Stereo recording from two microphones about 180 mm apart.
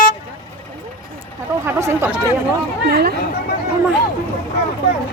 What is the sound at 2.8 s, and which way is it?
Speech, 60° right (ahead or behind).